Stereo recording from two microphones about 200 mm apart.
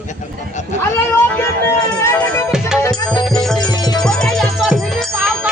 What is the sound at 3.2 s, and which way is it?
Music, centre (ahead or behind).